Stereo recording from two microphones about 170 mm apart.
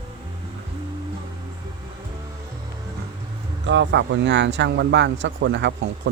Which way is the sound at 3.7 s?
90° right.